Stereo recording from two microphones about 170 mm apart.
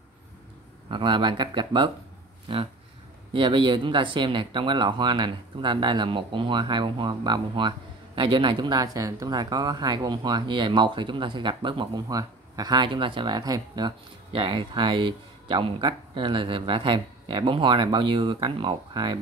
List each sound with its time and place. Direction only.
0.8 s speech: 30° right (ahead or behind)